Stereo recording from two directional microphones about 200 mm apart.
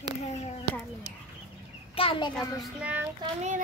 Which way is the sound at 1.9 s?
25° left (ahead or behind).